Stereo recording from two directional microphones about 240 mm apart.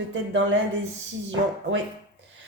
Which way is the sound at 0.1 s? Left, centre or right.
Right.